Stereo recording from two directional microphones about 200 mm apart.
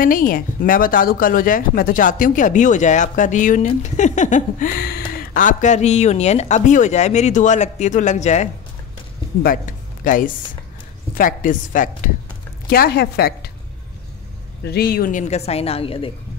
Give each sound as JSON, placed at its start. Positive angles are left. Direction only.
{"t": 0.0, "sound": "a woman's voice", "side_deg": 45}
{"t": 14.6, "sound": "speech", "side_deg": 55}